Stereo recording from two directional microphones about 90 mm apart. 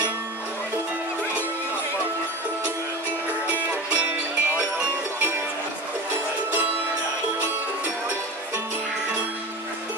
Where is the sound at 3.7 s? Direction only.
20° right (ahead or behind).